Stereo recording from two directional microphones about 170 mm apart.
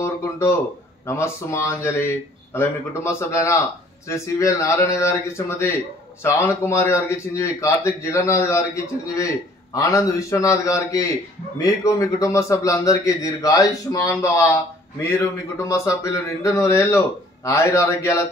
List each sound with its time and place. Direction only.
0.0 s a man's voice: 15° left (ahead or behind)